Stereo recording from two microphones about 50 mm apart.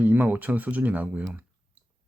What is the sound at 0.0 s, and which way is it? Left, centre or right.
Speech, right.